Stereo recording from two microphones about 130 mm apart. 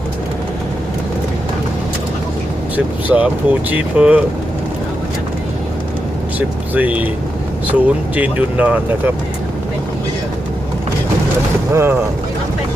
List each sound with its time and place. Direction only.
2.7 s speech: 10° right (ahead or behind)
6.7 s speech: 10° right (ahead or behind)
11.7 s speech: 20° right (ahead or behind)